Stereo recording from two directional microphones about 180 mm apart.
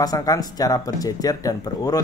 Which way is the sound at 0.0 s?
20° left (ahead or behind).